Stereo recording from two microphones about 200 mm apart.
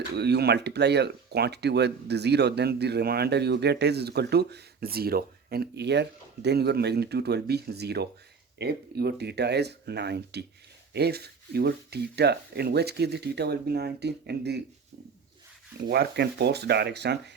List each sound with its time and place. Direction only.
0.1 s speech: 55° right (ahead or behind)
15.9 s speech: 55° right (ahead or behind)